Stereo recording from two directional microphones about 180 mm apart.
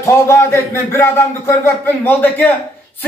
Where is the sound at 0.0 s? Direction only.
15° left (ahead or behind).